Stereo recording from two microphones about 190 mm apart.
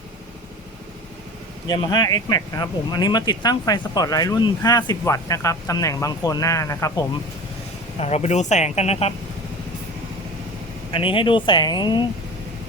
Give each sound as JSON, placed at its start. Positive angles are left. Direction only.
{"t": 1.6, "sound": "speech", "side_deg": 20}
{"t": 7.9, "sound": "speech", "side_deg": 35}
{"t": 10.9, "sound": "speech", "side_deg": 25}